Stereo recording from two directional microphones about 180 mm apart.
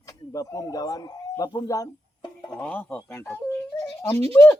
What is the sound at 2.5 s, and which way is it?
A man's voice, 5° left (ahead or behind).